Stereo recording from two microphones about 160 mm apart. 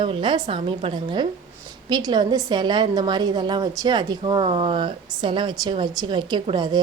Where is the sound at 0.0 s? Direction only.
30° right (ahead or behind).